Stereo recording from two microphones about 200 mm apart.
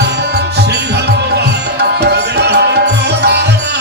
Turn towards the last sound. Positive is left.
turn(degrees=-55)  # may be behind; listen again after turning